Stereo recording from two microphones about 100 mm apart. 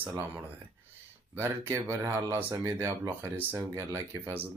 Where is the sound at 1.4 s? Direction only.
25° right (ahead or behind).